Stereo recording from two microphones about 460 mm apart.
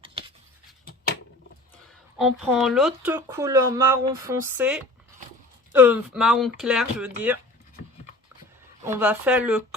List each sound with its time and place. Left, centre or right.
0.0 s writing: centre
2.1 s speech: centre
8.8 s speech: centre